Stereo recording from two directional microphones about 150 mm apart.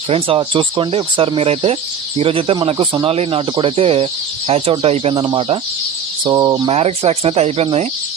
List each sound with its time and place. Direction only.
0.1 s speech: 35° right (ahead or behind)
5.1 s speech: 30° right (ahead or behind)
6.7 s speech: 40° right (ahead or behind)